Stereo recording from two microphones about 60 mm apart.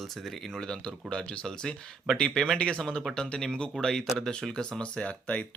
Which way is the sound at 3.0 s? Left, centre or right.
Centre.